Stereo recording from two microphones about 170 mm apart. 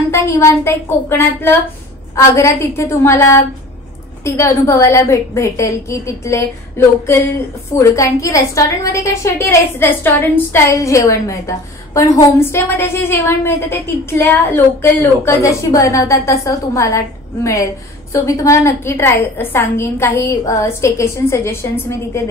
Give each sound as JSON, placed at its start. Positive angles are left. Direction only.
{"t": 0.1, "sound": "a woman's voice", "side_deg": 15}
{"t": 7.7, "sound": "a woman's voice", "side_deg": 20}